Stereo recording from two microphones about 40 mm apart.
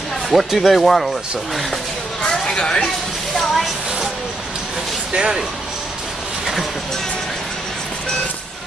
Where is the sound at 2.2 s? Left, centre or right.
Centre.